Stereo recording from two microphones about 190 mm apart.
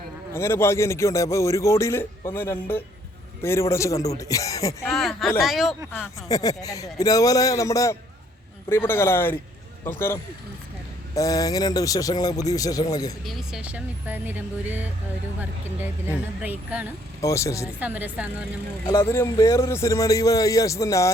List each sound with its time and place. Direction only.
0.3 s a man's voice: 15° left (ahead or behind)
4.9 s speech: centre (ahead or behind)
5.9 s a man's voice: 15° left (ahead or behind)
13.2 s speech: 5° right (ahead or behind)
17.2 s a man's voice: 15° left (ahead or behind)
17.7 s speech: 10° right (ahead or behind)
18.9 s a man's voice: 15° left (ahead or behind)